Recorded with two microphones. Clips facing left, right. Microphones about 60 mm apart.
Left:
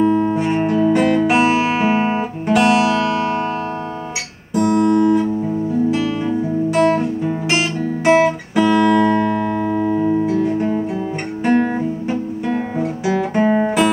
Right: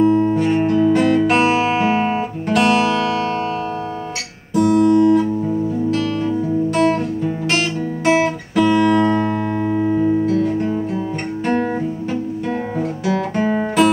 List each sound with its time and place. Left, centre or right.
0.0 s music: centre
4.7 s guitar: centre
5.9 s music: centre
9.0 s music: left
9.4 s music: centre
10.3 s guitar: centre
13.0 s music: centre